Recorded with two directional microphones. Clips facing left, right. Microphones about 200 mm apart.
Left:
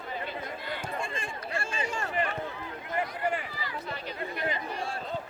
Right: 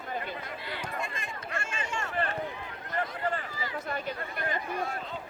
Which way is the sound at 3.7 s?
50° right (ahead or behind).